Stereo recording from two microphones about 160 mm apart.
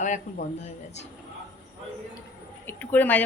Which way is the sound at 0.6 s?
45° left (ahead or behind).